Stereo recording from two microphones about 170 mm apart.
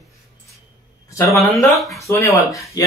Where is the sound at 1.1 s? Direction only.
20° left (ahead or behind).